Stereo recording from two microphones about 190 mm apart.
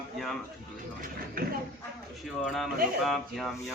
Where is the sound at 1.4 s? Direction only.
50° right (ahead or behind).